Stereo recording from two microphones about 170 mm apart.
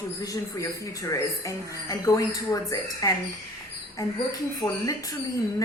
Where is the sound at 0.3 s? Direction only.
20° left (ahead or behind).